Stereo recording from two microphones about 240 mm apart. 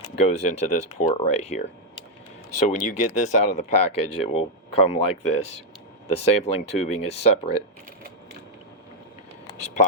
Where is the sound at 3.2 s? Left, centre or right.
Left.